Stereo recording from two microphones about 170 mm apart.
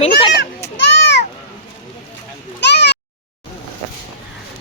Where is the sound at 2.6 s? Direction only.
90° left.